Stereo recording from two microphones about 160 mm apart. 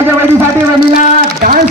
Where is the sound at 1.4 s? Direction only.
60° right (ahead or behind).